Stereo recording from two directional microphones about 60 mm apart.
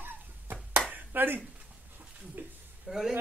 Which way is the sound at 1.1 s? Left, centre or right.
Right.